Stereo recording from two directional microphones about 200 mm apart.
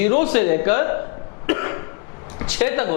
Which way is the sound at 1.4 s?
15° left (ahead or behind).